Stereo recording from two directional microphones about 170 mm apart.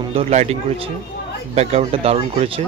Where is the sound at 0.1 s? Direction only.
40° right (ahead or behind).